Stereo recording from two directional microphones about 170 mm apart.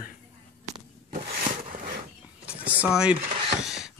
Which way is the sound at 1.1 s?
45° right (ahead or behind).